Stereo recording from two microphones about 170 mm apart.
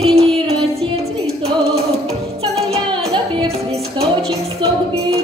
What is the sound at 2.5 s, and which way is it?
Music, 35° right (ahead or behind).